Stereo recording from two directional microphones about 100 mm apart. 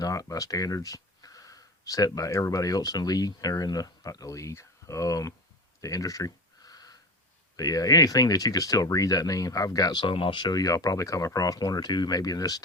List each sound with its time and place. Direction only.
0.0 s speech: 35° left (ahead or behind)
5.8 s a sound: 35° left (ahead or behind)
7.5 s speech: 40° left (ahead or behind)